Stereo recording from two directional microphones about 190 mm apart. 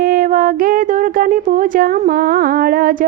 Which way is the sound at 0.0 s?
50° right (ahead or behind).